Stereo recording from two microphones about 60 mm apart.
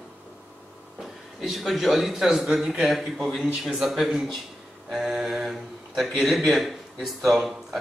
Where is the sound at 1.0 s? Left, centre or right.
Centre.